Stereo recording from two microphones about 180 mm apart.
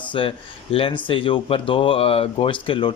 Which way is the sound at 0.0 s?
30° left (ahead or behind).